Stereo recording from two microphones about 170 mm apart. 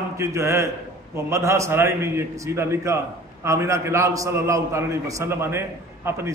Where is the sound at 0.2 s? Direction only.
15° right (ahead or behind).